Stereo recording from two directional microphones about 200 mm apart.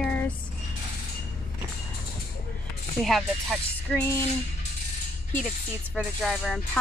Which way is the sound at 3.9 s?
10° left (ahead or behind).